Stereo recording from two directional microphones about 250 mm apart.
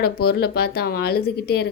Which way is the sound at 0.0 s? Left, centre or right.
Left.